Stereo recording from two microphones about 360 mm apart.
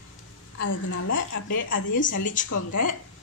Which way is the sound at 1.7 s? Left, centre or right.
Left.